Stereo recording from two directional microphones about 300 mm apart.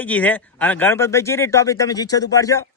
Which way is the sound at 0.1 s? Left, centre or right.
Centre.